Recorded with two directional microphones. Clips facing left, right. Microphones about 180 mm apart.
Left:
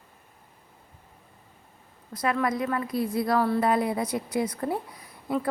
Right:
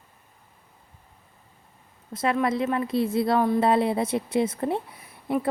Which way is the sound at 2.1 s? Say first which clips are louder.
Right 2 dB; 25° right (ahead or behind).